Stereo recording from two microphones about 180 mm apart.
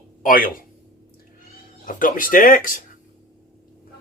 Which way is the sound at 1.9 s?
50° left (ahead or behind).